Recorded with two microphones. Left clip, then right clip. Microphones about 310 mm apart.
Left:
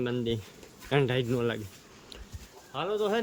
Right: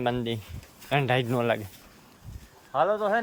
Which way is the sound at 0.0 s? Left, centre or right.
Centre.